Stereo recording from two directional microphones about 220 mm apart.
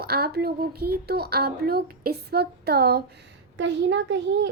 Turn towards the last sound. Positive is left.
turn(degrees=-55)  # may be behind; listen again after turning